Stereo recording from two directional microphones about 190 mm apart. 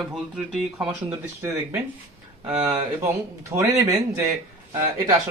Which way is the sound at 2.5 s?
25° right (ahead or behind).